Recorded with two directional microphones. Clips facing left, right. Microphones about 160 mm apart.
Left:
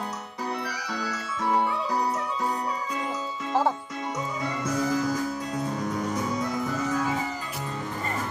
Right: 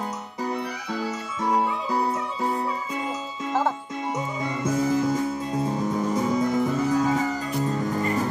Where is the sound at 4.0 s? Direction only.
20° right (ahead or behind).